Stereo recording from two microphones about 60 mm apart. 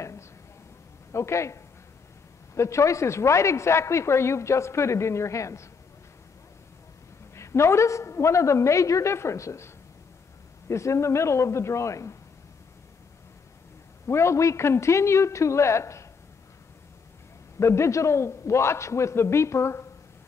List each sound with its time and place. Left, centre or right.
1.1 s a woman's voice: left
7.3 s a woman's voice: left
10.7 s a woman's voice: left
14.0 s a woman's voice: left
17.6 s a woman's voice: left